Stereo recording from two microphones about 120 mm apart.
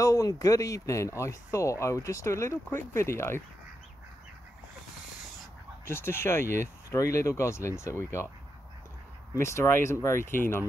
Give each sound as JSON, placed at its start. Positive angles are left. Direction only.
{"t": 0.0, "sound": "speech", "side_deg": 30}
{"t": 5.9, "sound": "speech", "side_deg": 20}
{"t": 9.4, "sound": "speech", "side_deg": 25}